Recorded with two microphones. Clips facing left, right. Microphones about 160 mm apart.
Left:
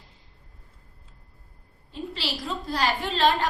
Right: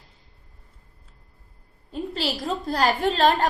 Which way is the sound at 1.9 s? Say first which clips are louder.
Right 5 dB; 45° right (ahead or behind).